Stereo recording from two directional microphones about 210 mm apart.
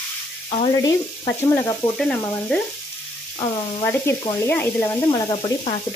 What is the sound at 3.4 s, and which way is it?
Speech, 15° left (ahead or behind).